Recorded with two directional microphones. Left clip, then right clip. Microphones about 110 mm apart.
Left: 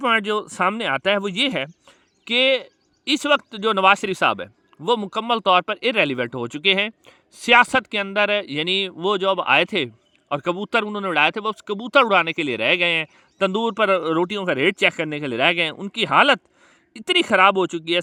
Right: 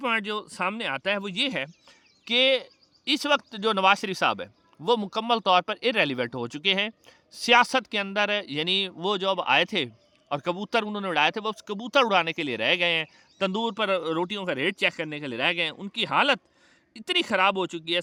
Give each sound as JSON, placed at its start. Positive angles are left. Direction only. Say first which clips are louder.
{"t": 0.0, "sound": "speech", "louder": "left 7 dB", "side_deg": 70}
{"t": 13.6, "sound": "speech", "louder": "left 7 dB", "side_deg": 55}